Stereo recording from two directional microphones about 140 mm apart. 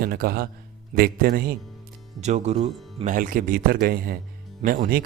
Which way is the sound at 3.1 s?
75° right (ahead or behind).